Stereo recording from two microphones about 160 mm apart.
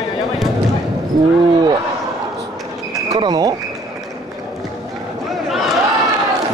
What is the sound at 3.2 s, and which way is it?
Speech, 25° right (ahead or behind).